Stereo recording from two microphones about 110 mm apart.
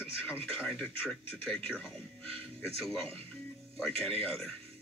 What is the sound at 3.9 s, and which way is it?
Speech, 60° right (ahead or behind).